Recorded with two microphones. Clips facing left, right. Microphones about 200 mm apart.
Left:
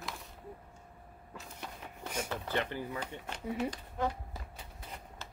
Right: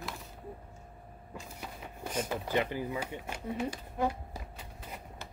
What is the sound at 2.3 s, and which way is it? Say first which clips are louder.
Speech: right 4 dB; 10° right (ahead or behind).